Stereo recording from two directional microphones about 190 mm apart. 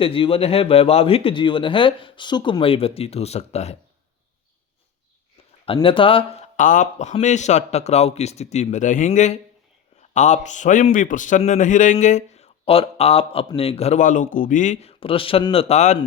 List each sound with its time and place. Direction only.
0.0 s speech: 30° left (ahead or behind)
5.6 s a man's voice: 25° left (ahead or behind)